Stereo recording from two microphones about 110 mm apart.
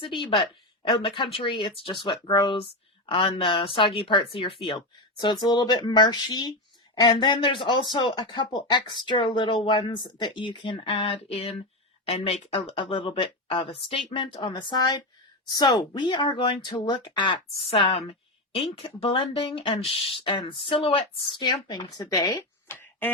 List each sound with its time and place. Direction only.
0.0 s speech: 50° left (ahead or behind)
17.7 s speech: 65° left (ahead or behind)
18.5 s speech: 55° left (ahead or behind); by 22.4 s 35° left (ahead or behind)
22.7 s a sound: 20° left (ahead or behind)